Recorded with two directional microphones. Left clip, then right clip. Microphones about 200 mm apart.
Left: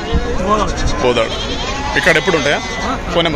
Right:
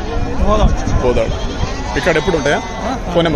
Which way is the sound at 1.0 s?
5° right (ahead or behind).